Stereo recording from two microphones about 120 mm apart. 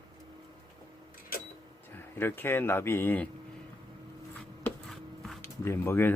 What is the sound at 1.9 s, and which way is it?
Speech, 20° left (ahead or behind).